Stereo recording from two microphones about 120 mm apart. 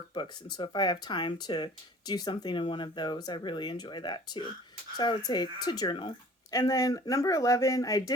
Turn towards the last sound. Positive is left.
turn(degrees=30)  # may be behind; listen again after turning